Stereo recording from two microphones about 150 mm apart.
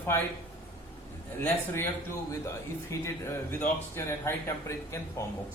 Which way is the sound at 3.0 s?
15° left (ahead or behind).